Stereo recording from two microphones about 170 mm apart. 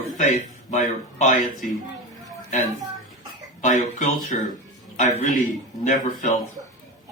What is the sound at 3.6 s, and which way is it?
Speech, 45° left (ahead or behind).